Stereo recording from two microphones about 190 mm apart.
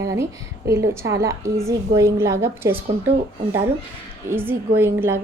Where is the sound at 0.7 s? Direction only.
15° right (ahead or behind).